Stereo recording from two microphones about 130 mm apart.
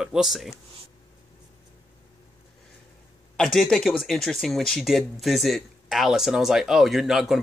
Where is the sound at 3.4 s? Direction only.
5° left (ahead or behind).